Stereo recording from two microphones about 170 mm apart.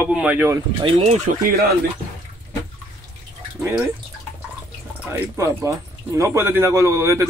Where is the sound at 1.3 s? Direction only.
50° right (ahead or behind).